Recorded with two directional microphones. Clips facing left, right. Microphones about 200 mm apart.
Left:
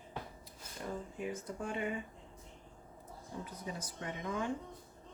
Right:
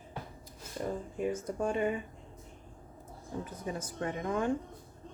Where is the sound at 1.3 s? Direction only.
45° right (ahead or behind).